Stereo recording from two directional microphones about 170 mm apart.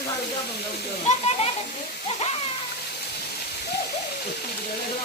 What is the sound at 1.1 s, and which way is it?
Speech, 40° left (ahead or behind).